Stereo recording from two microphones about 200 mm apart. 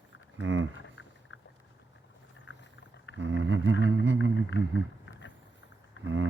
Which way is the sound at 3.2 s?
65° right (ahead or behind).